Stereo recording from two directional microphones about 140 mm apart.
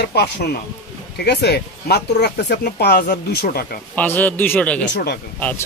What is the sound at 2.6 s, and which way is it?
Speech, 90° left.